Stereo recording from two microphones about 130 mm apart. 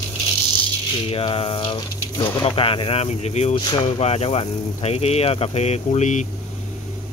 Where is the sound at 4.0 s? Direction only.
50° left (ahead or behind).